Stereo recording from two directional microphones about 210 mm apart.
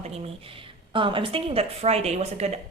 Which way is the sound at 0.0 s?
30° right (ahead or behind).